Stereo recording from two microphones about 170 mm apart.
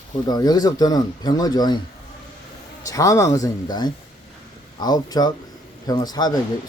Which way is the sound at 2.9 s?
20° left (ahead or behind).